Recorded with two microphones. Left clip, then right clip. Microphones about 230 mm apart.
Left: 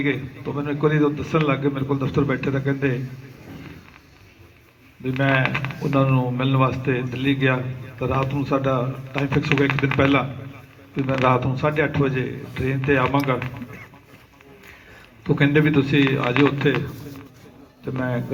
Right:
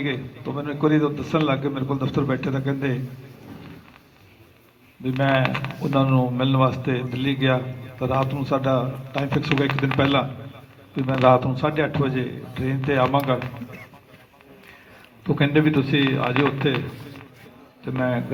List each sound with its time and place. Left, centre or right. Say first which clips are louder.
0.0 s speech: left 3 dB; right
5.0 s speech: even; right
15.2 s speech: left 1 dB; right
17.8 s speech: right 2 dB; right